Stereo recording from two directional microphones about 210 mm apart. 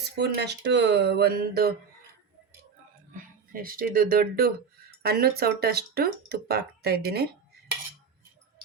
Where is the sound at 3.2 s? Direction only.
40° right (ahead or behind).